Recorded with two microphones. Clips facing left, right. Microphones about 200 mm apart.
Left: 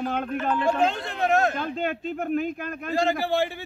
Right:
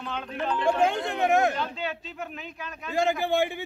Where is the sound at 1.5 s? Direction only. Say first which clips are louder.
Left 4 dB; 50° left (ahead or behind).